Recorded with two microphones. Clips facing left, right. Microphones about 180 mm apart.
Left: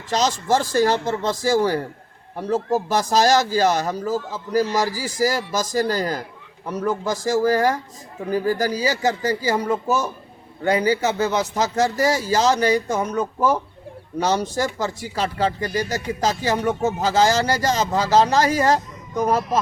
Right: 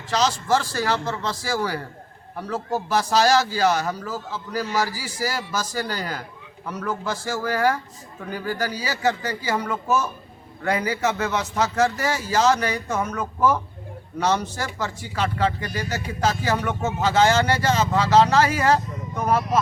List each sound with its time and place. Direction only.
0.1 s a man's voice: 40° left (ahead or behind)